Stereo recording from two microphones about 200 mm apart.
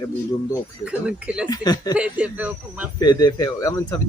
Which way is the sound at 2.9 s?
20° left (ahead or behind).